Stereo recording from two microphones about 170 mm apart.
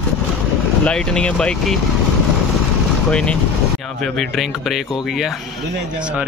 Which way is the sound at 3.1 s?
5° left (ahead or behind).